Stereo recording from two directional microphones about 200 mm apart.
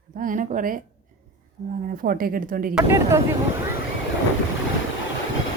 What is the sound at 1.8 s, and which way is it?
Speech, 45° right (ahead or behind).